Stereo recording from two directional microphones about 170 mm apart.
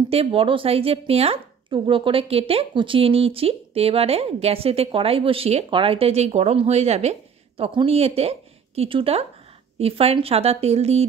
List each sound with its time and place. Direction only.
0.1 s a woman's voice: 35° right (ahead or behind)